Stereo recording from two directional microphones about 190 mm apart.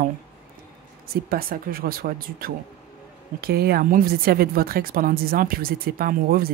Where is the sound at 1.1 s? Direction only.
50° right (ahead or behind).